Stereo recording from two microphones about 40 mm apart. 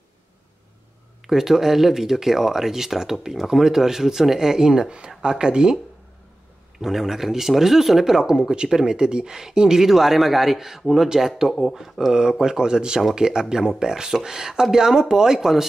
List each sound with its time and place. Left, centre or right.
1.2 s speech: centre
6.8 s speech: centre